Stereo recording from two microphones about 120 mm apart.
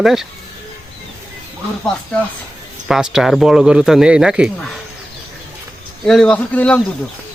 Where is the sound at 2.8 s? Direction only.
5° right (ahead or behind).